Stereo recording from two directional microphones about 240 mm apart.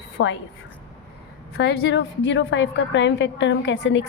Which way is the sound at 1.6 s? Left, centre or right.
Left.